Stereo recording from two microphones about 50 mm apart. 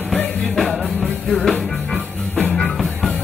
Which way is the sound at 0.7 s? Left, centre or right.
Centre.